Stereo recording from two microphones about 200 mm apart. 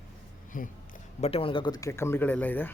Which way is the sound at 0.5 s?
45° left (ahead or behind).